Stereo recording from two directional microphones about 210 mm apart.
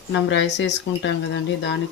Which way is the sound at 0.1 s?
60° left (ahead or behind).